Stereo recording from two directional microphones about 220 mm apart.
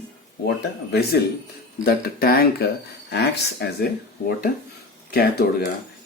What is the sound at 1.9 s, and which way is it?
Speech, 45° left (ahead or behind).